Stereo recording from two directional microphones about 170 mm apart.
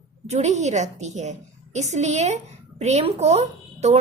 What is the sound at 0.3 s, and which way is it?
A woman's voice, 40° right (ahead or behind).